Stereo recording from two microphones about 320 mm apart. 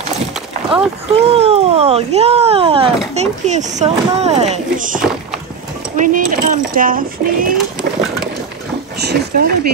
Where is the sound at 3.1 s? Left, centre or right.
Right.